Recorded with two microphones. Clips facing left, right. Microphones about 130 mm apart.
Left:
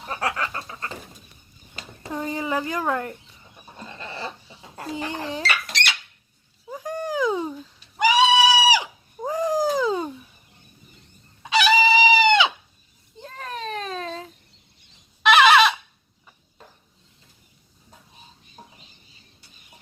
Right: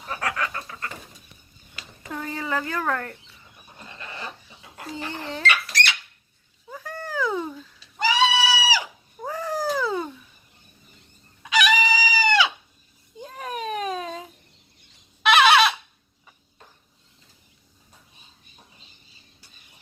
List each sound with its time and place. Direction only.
0.0 s bird: 30° left (ahead or behind)
2.1 s speech: 15° left (ahead or behind)
4.0 s goat: 30° left (ahead or behind)
4.9 s speech: 15° left (ahead or behind)
6.7 s goat: 15° left (ahead or behind)
9.2 s a sound: 15° left (ahead or behind)
11.4 s chicken: 30° left (ahead or behind)
13.1 s baby cry: 10° right (ahead or behind)
15.2 s goat: centre (ahead or behind)